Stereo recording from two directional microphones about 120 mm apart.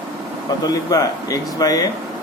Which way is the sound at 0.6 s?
30° left (ahead or behind).